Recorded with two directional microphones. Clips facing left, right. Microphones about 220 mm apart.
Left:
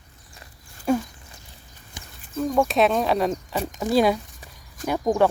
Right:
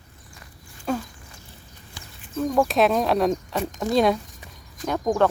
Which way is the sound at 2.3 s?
Centre (ahead or behind).